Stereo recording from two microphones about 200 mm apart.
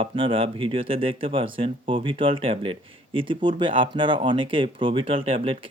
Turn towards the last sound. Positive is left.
turn(degrees=-30)  # may be behind; listen again after turning